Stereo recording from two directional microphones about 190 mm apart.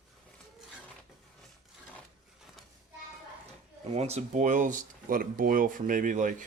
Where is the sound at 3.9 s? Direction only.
35° right (ahead or behind).